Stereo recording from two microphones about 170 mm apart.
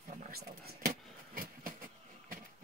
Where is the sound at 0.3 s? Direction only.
65° right (ahead or behind).